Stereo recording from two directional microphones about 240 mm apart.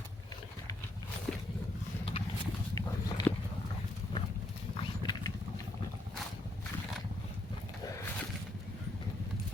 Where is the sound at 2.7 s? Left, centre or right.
Centre.